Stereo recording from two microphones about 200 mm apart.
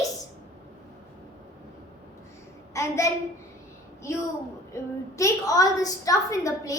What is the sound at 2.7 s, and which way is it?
Speech, 15° left (ahead or behind).